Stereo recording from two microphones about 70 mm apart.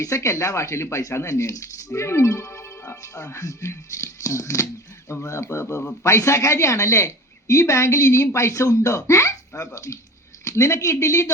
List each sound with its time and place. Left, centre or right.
0.0 s speech: left